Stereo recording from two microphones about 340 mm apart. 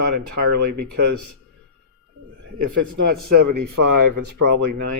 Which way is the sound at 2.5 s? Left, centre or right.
Right.